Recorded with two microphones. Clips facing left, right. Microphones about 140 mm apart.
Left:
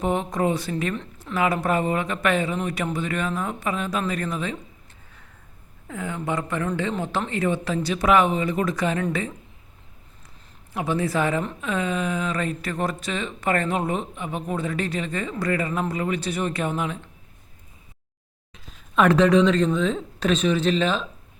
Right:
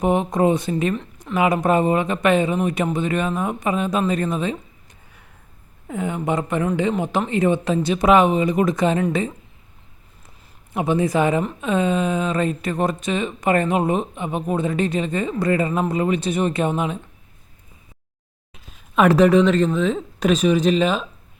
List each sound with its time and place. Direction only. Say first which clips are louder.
0.0 s speech: right 5 dB; 15° right (ahead or behind)
5.9 s speech: right 5 dB; 20° right (ahead or behind)
10.8 s speech: right 5 dB; 20° right (ahead or behind)
18.5 s speech: right 2 dB; 10° right (ahead or behind)